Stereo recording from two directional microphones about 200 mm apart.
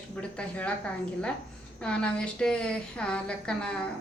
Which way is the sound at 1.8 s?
5° left (ahead or behind).